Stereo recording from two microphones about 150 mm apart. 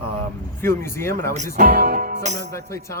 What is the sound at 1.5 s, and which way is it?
Music, 75° right (ahead or behind).